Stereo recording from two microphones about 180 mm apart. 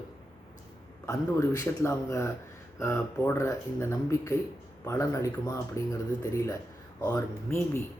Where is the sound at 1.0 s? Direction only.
20° left (ahead or behind).